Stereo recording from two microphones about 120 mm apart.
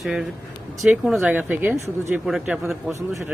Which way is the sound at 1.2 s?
15° right (ahead or behind).